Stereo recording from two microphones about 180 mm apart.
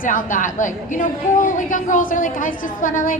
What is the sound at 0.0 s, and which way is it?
A woman's voice, 50° left (ahead or behind).